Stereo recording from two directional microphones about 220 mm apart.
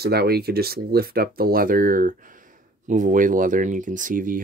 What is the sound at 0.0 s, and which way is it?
Speech, 45° right (ahead or behind).